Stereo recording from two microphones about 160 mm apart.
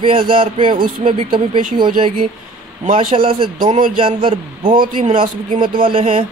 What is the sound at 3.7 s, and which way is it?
Speech, 55° right (ahead or behind).